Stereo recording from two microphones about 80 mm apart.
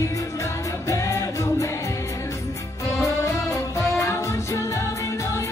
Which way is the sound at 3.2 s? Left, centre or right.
Left.